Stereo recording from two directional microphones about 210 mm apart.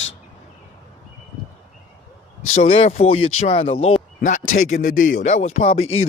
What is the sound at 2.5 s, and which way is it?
Speech, 30° left (ahead or behind).